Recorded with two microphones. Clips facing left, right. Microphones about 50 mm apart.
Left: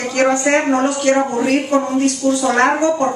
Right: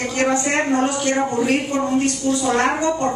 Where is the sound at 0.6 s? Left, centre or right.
Left.